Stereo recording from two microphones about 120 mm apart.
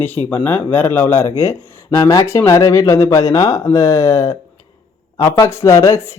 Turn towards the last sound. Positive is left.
turn(degrees=25)  # may be behind; listen again after turning